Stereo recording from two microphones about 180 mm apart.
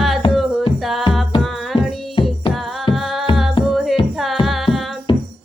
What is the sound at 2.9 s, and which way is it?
Music, centre (ahead or behind).